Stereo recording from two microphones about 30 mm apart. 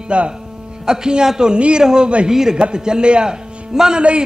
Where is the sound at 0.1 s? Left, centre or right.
Right.